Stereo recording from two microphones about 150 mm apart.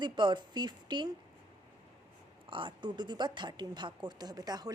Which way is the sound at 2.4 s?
35° right (ahead or behind).